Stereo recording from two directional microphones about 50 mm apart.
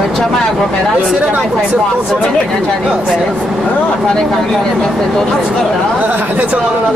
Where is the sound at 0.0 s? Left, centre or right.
Centre.